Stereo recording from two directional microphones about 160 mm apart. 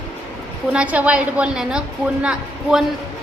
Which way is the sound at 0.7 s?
10° right (ahead or behind).